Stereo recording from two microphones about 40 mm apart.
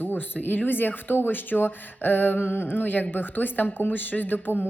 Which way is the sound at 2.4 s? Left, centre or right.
Left.